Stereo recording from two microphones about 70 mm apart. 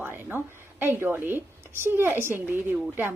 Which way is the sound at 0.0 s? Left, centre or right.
Right.